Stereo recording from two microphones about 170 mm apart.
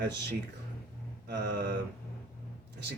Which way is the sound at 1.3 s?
80° right.